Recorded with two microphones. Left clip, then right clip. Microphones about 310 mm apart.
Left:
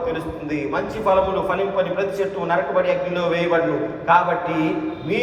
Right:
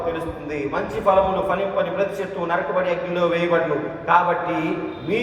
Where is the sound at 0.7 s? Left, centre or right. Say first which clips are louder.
Right 1 dB; left.